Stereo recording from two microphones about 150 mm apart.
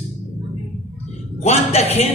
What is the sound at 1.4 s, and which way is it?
Speech, 45° left (ahead or behind).